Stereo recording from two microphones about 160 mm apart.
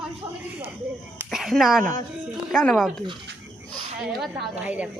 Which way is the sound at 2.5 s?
Centre (ahead or behind).